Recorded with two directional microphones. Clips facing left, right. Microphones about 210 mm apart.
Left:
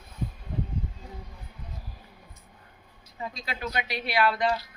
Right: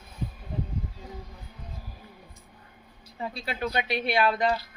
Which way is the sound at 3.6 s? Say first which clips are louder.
Right 3 dB; 30° right (ahead or behind).